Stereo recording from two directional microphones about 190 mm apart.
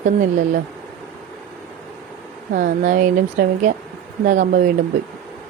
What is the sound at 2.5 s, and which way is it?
Speech, 45° right (ahead or behind).